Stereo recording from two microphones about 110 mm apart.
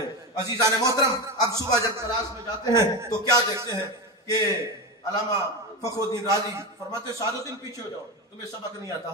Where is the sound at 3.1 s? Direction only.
35° left (ahead or behind).